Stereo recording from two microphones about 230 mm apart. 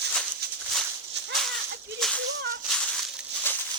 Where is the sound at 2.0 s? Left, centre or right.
Centre.